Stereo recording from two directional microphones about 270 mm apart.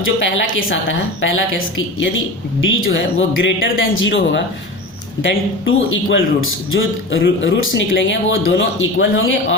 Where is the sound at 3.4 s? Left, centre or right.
Left.